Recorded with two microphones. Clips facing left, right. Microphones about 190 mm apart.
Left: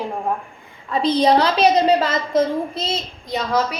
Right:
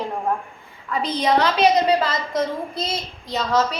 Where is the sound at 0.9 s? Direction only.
30° left (ahead or behind).